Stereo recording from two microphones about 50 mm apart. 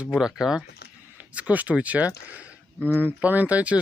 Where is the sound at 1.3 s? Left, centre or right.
Right.